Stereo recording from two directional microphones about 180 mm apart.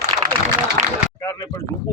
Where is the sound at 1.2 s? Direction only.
15° left (ahead or behind).